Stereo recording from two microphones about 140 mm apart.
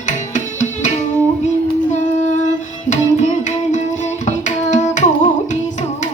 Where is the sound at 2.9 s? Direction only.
55° left (ahead or behind).